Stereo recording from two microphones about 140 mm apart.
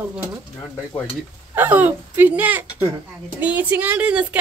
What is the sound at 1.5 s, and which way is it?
A woman's voice, 10° right (ahead or behind).